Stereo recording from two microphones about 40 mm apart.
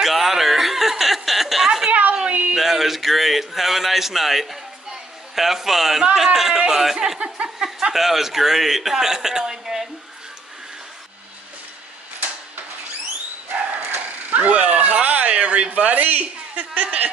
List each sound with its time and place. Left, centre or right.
0.0 s chuckle: centre
1.9 s a sound: right
2.5 s a man's voice: centre
7.2 s a man's voice: right
13.9 s speech: right